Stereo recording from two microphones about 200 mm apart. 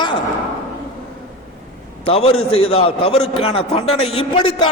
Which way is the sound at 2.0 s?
30° left (ahead or behind).